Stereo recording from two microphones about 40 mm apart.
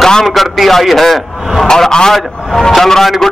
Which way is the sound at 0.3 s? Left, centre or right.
Centre.